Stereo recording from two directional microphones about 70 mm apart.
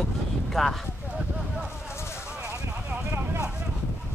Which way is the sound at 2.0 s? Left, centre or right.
Left.